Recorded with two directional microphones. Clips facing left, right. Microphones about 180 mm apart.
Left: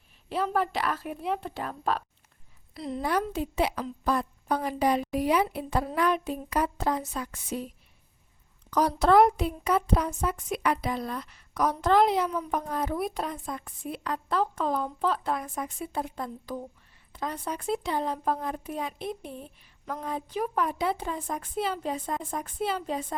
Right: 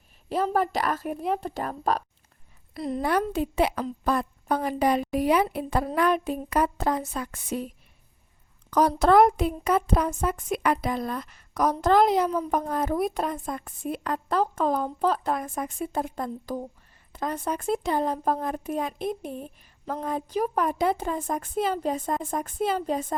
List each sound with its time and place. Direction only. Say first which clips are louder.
0.3 s speech: right 3 dB; 40° right (ahead or behind)
2.7 s a woman's voice: right 3 dB; 50° right (ahead or behind)
8.7 s speech: right 2 dB; 50° right (ahead or behind)